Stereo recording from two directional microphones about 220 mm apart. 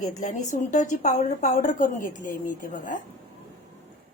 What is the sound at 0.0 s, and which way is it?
A woman's voice, 30° left (ahead or behind).